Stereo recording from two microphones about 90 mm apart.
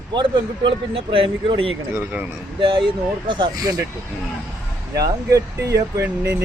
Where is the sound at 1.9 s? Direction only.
20° right (ahead or behind).